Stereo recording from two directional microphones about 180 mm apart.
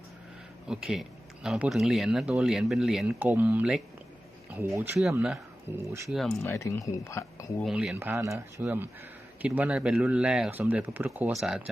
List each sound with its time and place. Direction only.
0.7 s speech: 5° right (ahead or behind)
6.1 s speech: centre (ahead or behind)
6.4 s speech: 15° left (ahead or behind)
7.6 s speech: 5° right (ahead or behind)